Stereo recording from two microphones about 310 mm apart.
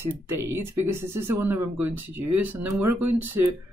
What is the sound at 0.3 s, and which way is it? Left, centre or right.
Speech, right.